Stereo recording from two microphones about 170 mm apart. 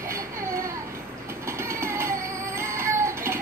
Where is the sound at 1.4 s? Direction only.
15° right (ahead or behind).